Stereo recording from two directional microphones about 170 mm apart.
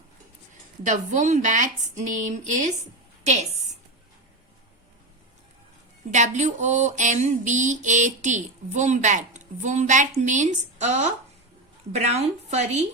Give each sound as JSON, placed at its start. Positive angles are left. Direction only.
{"t": 0.9, "sound": "a woman's voice", "side_deg": -45}
{"t": 6.1, "sound": "speech", "side_deg": -45}